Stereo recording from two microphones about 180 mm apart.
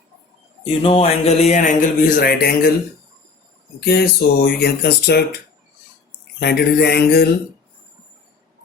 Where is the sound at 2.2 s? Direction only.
55° left (ahead or behind).